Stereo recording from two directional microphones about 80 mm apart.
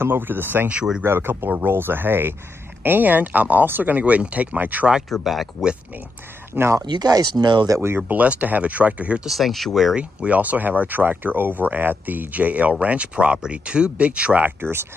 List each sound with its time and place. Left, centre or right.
0.0 s speech: right
0.7 s speech: centre
1.0 s speech: right
5.1 s speech: centre
6.5 s speech: right
6.9 s speech: right
7.8 s speech: right
8.2 s speech: centre
9.2 s speech: centre
9.9 s speech: centre